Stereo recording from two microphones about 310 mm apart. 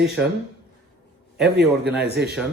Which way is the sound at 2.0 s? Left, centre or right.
Right.